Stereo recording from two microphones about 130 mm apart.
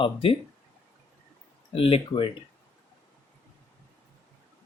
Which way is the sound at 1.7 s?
45° left (ahead or behind).